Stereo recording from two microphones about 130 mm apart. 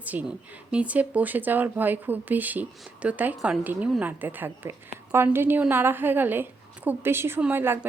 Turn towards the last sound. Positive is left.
turn(degrees=-15)  # may be behind; listen again after turning